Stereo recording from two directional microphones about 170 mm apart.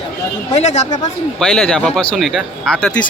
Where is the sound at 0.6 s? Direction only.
40° left (ahead or behind).